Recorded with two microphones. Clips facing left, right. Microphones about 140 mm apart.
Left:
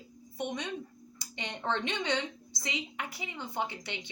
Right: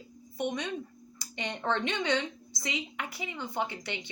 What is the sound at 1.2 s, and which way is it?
A woman's voice, 20° left (ahead or behind).